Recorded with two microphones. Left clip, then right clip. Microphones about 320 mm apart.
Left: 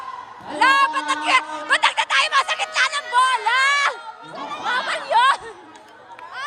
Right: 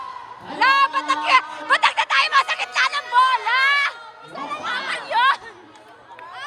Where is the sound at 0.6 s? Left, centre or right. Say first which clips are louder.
Even; centre.